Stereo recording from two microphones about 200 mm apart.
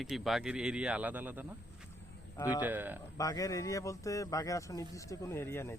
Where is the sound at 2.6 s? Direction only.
10° right (ahead or behind).